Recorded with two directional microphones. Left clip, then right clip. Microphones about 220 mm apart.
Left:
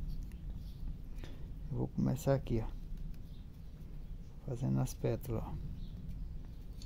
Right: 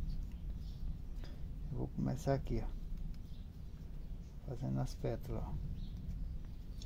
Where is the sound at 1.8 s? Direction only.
45° left (ahead or behind).